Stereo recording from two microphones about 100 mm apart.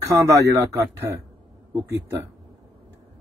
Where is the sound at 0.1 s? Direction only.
35° right (ahead or behind).